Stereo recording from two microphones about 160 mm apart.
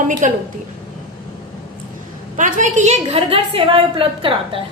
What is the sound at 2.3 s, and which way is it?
A woman's voice, 55° right (ahead or behind).